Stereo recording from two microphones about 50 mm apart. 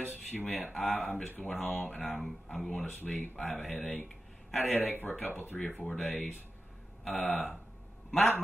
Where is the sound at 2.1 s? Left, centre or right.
Centre.